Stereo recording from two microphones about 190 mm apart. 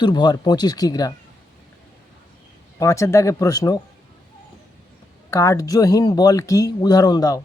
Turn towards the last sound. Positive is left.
turn(degrees=20)  # may be behind; listen again after turning